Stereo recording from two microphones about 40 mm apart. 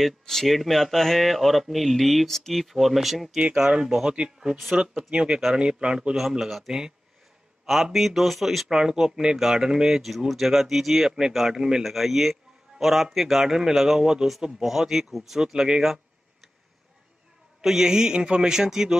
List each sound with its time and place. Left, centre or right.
0.2 s speech: centre
3.5 s a man's voice: centre
5.3 s a man's voice: centre
5.6 s a man's voice: right
6.4 s a man's voice: centre
17.6 s a man's voice: centre